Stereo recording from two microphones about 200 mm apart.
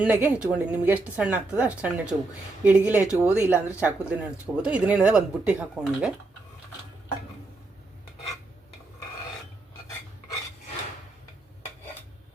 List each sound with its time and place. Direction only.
0.0 s speech: 5° right (ahead or behind)